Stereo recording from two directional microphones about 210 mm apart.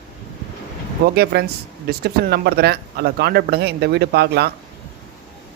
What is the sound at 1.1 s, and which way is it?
Speech, 50° right (ahead or behind).